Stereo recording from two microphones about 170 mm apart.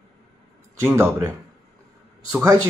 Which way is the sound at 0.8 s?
15° right (ahead or behind).